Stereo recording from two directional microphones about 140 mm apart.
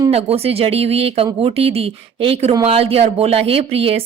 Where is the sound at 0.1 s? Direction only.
45° right (ahead or behind).